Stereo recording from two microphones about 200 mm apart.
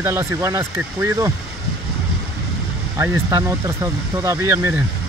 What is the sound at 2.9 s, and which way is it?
Speech, 15° right (ahead or behind).